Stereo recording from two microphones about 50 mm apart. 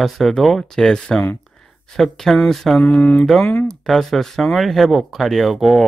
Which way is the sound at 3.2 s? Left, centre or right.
Centre.